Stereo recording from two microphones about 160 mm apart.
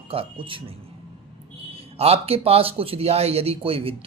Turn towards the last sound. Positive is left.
turn(degrees=-35)  # may be behind; listen again after turning